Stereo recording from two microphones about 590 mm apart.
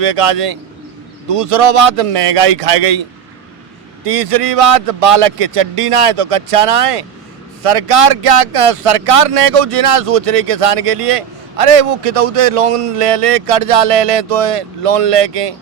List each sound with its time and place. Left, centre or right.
0.0 s speech: right
4.0 s speech: right